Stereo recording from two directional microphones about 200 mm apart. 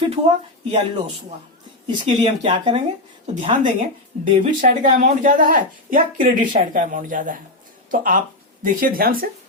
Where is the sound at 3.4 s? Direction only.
35° right (ahead or behind).